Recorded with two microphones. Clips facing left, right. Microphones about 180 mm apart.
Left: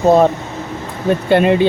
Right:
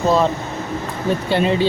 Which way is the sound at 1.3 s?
60° left (ahead or behind).